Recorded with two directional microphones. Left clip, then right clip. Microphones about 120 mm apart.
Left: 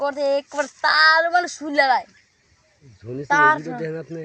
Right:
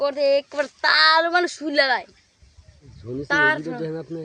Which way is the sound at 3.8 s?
10° left (ahead or behind).